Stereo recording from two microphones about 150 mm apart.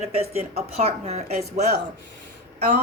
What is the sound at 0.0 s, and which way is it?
Speech, 45° right (ahead or behind).